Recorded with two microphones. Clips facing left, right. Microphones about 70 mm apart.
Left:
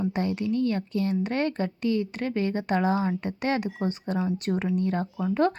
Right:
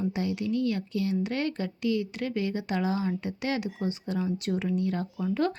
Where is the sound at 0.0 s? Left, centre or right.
Left.